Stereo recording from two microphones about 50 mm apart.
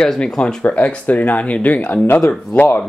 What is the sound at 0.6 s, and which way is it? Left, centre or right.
Speech, left.